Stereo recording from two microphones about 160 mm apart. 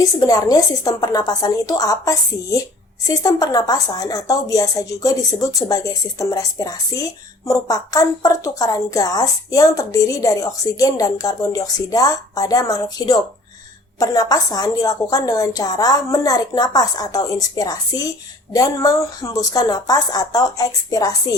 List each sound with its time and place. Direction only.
0.0 s a woman's voice: 25° left (ahead or behind)